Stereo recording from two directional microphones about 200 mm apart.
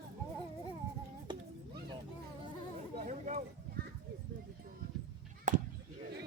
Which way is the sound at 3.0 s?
40° right (ahead or behind).